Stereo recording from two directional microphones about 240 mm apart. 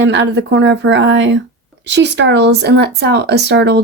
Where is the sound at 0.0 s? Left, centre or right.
Right.